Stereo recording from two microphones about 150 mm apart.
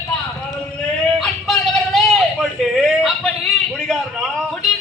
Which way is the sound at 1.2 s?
Centre (ahead or behind).